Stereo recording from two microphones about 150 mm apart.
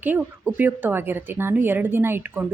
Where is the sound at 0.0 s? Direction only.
10° right (ahead or behind).